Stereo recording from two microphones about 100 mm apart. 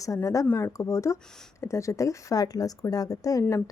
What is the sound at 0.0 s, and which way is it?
Speech, 35° left (ahead or behind).